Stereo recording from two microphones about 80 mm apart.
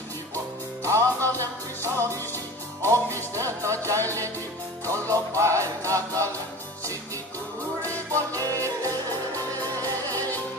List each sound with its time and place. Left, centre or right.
0.8 s music: right
7.8 s music: right